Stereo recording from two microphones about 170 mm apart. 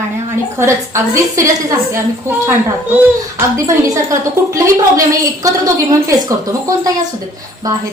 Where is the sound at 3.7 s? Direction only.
15° right (ahead or behind).